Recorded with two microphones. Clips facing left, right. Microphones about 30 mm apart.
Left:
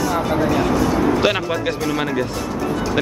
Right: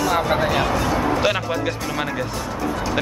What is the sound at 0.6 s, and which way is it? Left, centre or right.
Speech, centre.